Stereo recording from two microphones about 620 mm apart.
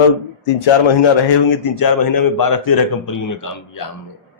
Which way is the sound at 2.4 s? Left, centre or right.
Left.